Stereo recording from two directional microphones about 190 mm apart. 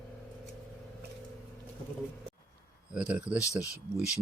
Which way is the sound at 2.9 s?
5° right (ahead or behind).